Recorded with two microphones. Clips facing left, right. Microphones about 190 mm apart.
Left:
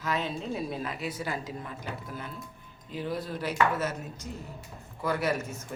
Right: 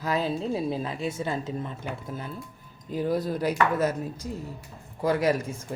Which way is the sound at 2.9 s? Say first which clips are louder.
Right 7 dB; 40° right (ahead or behind).